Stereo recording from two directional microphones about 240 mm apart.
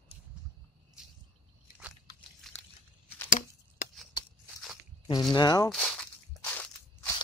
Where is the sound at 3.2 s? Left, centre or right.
Left.